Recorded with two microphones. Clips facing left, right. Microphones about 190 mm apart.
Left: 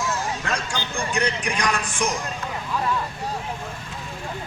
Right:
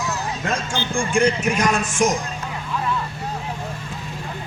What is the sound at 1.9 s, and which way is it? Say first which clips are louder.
Speech: right 6 dB; 45° right (ahead or behind).